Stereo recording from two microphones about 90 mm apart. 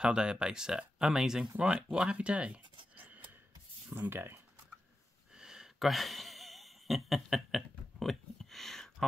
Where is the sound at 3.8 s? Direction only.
25° right (ahead or behind).